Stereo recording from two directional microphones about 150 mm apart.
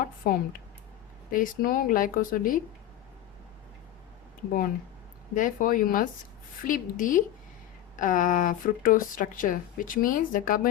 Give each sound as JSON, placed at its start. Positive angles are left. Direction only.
{"t": 0.0, "sound": "speech", "side_deg": 70}
{"t": 5.3, "sound": "speech", "side_deg": 60}